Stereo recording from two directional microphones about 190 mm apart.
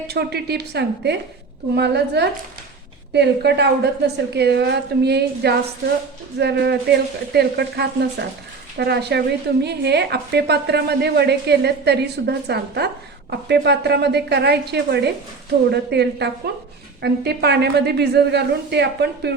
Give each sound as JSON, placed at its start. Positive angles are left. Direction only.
{"t": 0.1, "sound": "a woman's voice", "side_deg": -60}